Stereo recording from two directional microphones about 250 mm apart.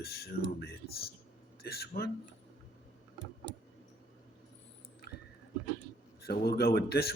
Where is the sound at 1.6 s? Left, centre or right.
Left.